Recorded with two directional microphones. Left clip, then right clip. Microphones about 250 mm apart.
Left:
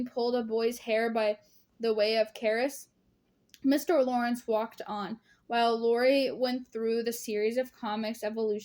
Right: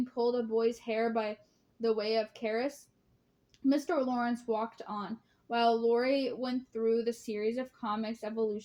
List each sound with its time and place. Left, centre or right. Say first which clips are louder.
0.1 s speech: left 2 dB; left